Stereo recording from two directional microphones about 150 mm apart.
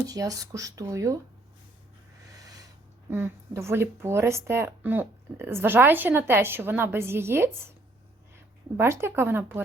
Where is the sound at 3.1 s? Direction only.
20° right (ahead or behind).